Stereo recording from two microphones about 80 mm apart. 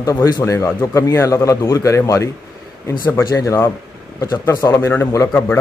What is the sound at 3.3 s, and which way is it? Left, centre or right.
Speech, left.